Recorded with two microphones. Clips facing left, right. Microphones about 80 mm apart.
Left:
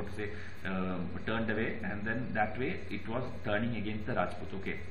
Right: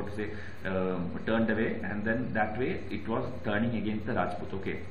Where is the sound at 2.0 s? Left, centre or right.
Centre.